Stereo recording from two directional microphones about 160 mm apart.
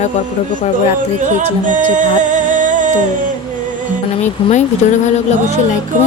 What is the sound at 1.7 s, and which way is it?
Music, 50° right (ahead or behind).